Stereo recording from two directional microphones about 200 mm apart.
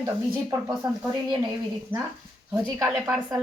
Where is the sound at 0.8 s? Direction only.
20° right (ahead or behind).